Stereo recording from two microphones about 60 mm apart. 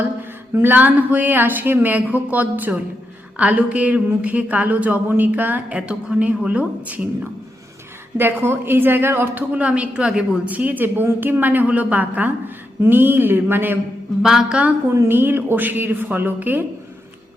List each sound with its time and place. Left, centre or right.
0.5 s speech: right
8.2 s a woman's voice: right
9.5 s a woman's voice: right
14.2 s a woman's voice: centre
15.0 s a woman's voice: right